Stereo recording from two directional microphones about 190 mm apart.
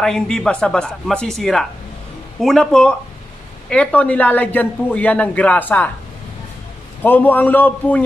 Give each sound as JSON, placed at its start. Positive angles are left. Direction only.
{"t": 0.0, "sound": "speech", "side_deg": 5}
{"t": 7.0, "sound": "speech", "side_deg": 10}